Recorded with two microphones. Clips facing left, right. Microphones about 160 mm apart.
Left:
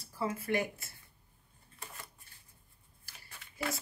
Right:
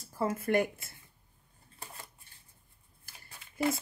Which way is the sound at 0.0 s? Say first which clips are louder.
Right 4 dB; 45° right (ahead or behind).